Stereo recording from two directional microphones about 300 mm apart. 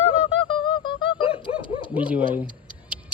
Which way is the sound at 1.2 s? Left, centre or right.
Centre.